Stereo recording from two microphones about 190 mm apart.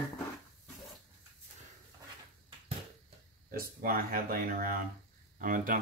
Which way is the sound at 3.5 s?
50° right (ahead or behind).